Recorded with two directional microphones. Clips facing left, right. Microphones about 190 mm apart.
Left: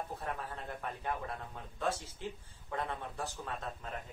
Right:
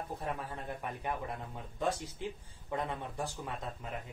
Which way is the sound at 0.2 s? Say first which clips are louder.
Right 2 dB; 15° right (ahead or behind).